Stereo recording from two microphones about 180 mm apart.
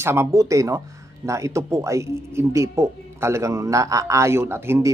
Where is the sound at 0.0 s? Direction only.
15° right (ahead or behind).